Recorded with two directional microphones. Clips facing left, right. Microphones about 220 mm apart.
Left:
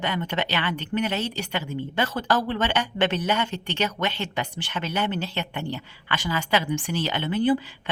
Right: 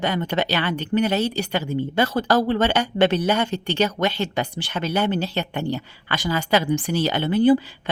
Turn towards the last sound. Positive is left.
turn(degrees=-40)  # may be behind; listen again after turning